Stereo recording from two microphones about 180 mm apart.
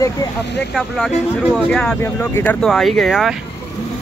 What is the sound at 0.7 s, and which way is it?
Speech, centre (ahead or behind).